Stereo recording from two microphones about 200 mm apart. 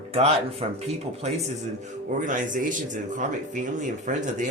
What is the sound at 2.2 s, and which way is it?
Speech, 40° right (ahead or behind).